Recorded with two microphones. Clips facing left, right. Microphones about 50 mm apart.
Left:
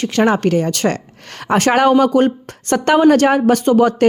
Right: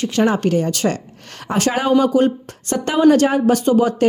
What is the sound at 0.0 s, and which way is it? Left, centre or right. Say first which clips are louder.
A woman's voice: left 2 dB; left.